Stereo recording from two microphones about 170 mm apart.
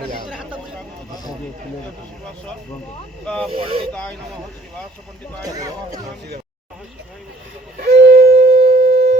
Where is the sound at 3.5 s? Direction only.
35° right (ahead or behind).